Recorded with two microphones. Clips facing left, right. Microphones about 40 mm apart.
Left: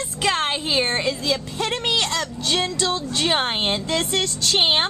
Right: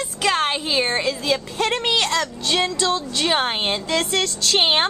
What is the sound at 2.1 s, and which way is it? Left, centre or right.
Speech, centre.